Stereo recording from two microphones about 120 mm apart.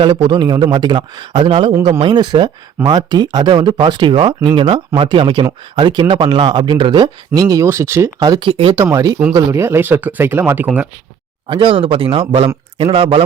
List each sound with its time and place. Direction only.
0.0 s speech: 40° right (ahead or behind)
8.7 s speech: 25° right (ahead or behind)
11.4 s speech: 45° right (ahead or behind)